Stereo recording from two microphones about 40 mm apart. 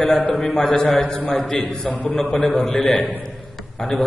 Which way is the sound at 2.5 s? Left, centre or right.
Centre.